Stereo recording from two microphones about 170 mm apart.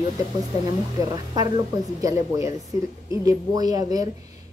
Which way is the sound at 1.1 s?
20° right (ahead or behind).